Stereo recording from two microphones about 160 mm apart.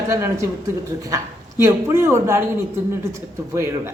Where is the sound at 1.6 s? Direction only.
15° right (ahead or behind).